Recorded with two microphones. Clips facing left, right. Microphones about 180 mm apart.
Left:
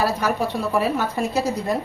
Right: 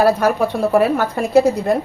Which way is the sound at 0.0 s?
55° right (ahead or behind).